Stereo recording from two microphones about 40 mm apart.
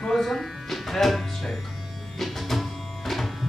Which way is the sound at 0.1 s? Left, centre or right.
Centre.